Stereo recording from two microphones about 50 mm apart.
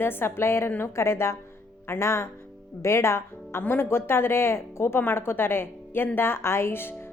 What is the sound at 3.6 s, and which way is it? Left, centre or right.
A woman's voice, left.